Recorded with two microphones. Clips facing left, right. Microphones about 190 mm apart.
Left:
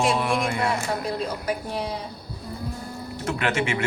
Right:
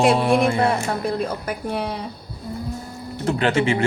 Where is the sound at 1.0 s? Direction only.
60° right (ahead or behind).